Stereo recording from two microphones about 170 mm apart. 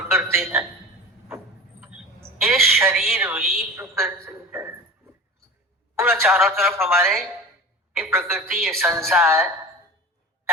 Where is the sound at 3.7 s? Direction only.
15° right (ahead or behind).